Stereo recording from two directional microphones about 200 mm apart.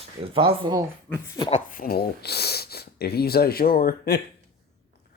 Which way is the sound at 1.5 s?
40° left (ahead or behind).